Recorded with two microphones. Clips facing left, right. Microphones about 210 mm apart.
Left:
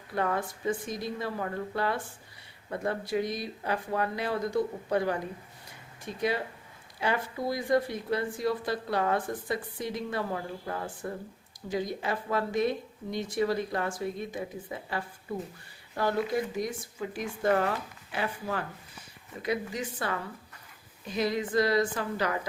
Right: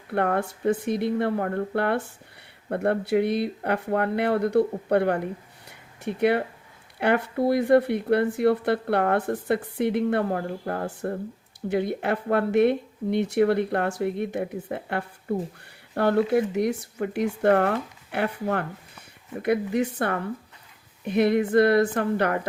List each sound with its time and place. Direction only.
0.1 s speech: 60° right (ahead or behind)